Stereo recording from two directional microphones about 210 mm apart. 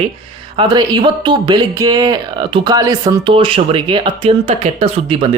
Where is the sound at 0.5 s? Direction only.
25° right (ahead or behind).